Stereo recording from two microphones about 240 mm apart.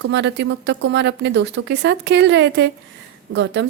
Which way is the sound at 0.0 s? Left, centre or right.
Right.